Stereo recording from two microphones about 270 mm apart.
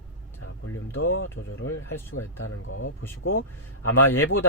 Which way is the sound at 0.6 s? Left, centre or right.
Left.